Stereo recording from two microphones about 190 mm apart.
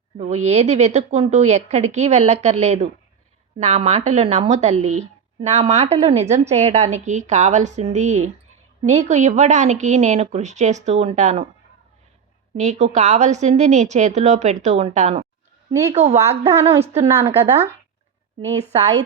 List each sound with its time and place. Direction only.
0.2 s a woman's voice: 35° right (ahead or behind)
12.5 s a woman's voice: 35° right (ahead or behind)
15.7 s speech: 15° right (ahead or behind)
16.8 s a woman's voice: 35° right (ahead or behind)
17.1 s speech: 15° right (ahead or behind)